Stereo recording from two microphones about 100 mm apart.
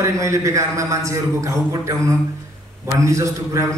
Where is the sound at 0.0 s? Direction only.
30° right (ahead or behind).